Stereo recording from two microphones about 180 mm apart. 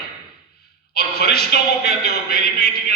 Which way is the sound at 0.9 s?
60° left (ahead or behind).